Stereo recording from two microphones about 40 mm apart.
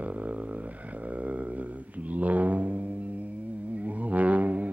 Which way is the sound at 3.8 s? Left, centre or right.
Right.